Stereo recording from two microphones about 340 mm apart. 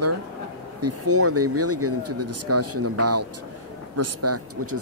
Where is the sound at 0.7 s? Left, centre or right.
Right.